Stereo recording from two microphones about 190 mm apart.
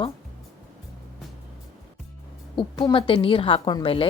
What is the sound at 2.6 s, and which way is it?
A woman's voice, 25° left (ahead or behind).